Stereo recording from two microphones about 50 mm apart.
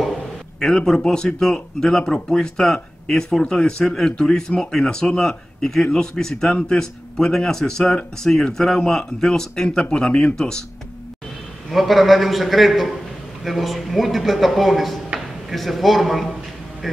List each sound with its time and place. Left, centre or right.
0.6 s a man's voice: centre
11.7 s a man's voice: centre